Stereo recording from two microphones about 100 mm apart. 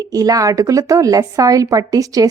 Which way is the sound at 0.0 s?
35° right (ahead or behind).